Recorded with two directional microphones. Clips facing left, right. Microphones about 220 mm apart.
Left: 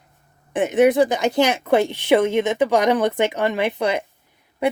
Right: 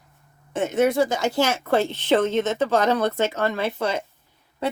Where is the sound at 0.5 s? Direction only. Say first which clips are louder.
Left 4 dB; 15° left (ahead or behind).